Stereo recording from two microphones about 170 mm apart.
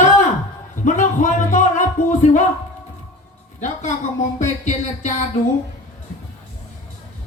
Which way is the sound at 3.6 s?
45° left (ahead or behind).